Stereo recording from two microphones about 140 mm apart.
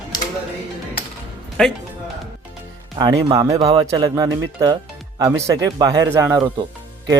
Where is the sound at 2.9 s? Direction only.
30° right (ahead or behind).